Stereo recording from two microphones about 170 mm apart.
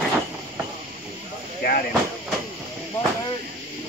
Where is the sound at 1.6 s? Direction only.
60° left (ahead or behind).